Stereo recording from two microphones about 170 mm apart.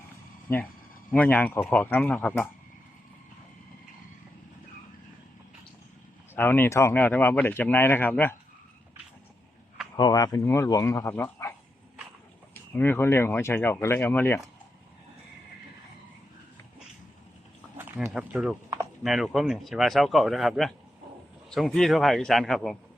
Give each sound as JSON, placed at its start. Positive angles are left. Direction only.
{"t": 0.5, "sound": "speech", "side_deg": 15}
{"t": 6.3, "sound": "speech", "side_deg": 10}
{"t": 10.0, "sound": "speech", "side_deg": 20}
{"t": 12.5, "sound": "speech", "side_deg": 10}
{"t": 17.7, "sound": "a sound", "side_deg": -10}
{"t": 18.1, "sound": "speech", "side_deg": -5}